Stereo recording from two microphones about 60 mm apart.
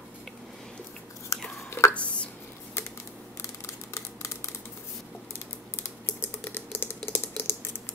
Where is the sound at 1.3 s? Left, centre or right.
Left.